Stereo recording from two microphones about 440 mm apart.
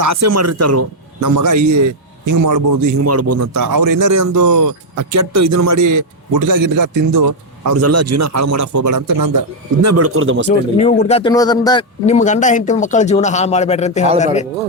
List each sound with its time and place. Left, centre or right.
0.0 s speech: right
9.8 s speech: right
10.8 s speech: centre